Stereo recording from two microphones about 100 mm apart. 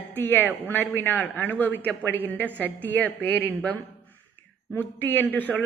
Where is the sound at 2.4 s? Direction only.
20° right (ahead or behind).